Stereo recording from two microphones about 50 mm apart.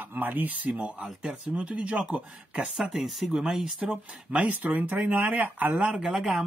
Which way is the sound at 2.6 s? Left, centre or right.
Centre.